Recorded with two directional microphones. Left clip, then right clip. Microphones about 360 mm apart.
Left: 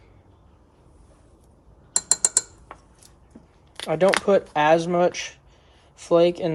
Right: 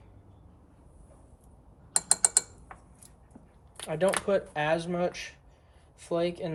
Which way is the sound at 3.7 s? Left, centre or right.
Centre.